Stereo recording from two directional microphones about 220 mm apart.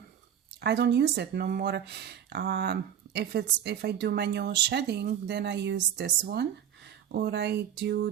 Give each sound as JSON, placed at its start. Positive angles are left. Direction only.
{"t": 0.6, "sound": "speech", "side_deg": -50}